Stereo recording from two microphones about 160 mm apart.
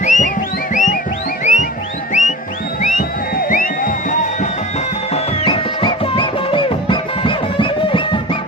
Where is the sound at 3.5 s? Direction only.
55° left (ahead or behind).